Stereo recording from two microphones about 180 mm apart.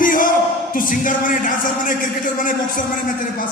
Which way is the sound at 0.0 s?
50° left (ahead or behind).